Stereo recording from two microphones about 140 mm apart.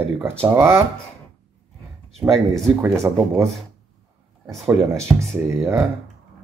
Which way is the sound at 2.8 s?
20° right (ahead or behind).